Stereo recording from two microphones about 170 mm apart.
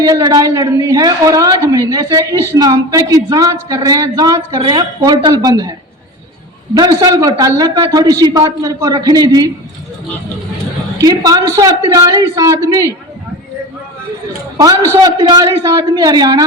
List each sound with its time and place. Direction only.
0.0 s speech: 25° right (ahead or behind)
6.7 s speech: 25° right (ahead or behind)
11.0 s speech: 20° right (ahead or behind)
14.9 s speech: 20° right (ahead or behind)